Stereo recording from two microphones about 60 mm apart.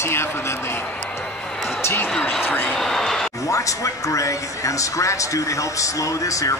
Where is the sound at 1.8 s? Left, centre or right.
Left.